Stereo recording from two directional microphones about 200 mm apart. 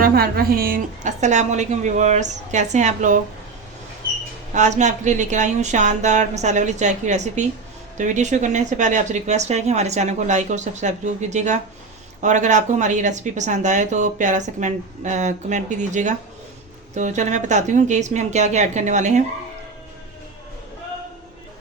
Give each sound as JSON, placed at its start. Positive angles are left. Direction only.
{"t": 0.0, "sound": "speech", "side_deg": -50}
{"t": 4.5, "sound": "speech", "side_deg": -35}